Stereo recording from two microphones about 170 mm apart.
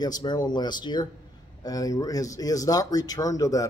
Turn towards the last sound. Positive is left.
turn(degrees=20)  # may be behind; listen again after turning